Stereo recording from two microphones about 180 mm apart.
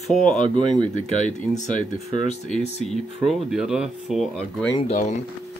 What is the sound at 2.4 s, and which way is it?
Speech, centre (ahead or behind).